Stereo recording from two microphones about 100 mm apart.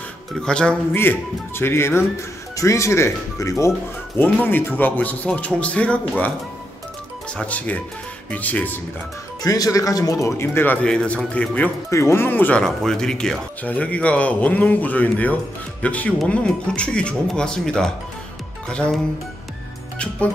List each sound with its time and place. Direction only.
0.4 s speech: 10° left (ahead or behind)
0.9 s speech: 25° left (ahead or behind)
4.2 s speech: 20° left (ahead or behind)
7.3 s speech: 15° left (ahead or behind)
9.4 s speech: 40° left (ahead or behind); by 11.7 s 15° left (ahead or behind)
11.9 s speech: 25° left (ahead or behind)
12.6 s speech: 5° left (ahead or behind)